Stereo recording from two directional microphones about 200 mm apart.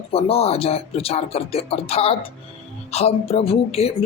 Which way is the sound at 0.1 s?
30° left (ahead or behind).